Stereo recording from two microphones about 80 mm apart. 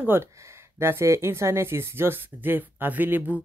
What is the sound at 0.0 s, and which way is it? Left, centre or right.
Speech, right.